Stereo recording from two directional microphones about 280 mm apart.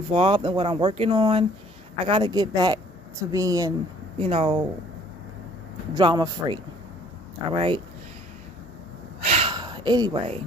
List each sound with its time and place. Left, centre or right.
0.1 s speech: centre
5.9 s speech: centre
9.2 s a sound: right